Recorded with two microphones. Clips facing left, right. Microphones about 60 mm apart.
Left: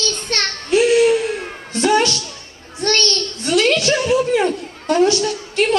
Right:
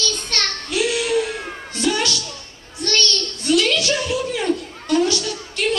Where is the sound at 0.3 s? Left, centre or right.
Left.